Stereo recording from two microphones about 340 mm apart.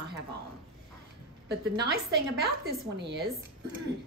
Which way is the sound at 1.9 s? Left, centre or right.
Right.